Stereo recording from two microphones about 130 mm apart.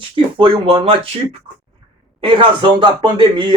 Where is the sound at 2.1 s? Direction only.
40° right (ahead or behind).